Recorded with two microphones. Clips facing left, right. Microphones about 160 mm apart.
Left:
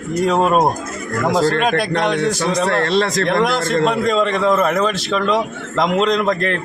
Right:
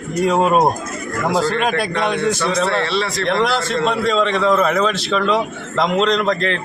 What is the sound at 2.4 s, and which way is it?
A man's voice, 40° left (ahead or behind).